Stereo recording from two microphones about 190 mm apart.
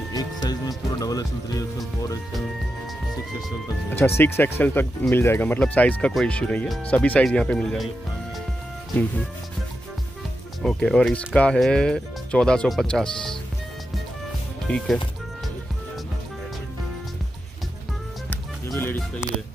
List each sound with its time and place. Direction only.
0.1 s music: 20° left (ahead or behind)
4.2 s speech: 10° left (ahead or behind)
10.6 s speech: 5° left (ahead or behind)
14.7 s speech: 10° left (ahead or behind)
18.3 s music: 10° left (ahead or behind)